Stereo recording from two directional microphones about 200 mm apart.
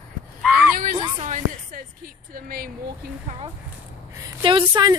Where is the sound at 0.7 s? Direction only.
45° right (ahead or behind).